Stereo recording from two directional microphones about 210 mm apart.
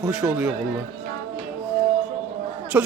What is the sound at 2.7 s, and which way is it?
Speech, 10° right (ahead or behind).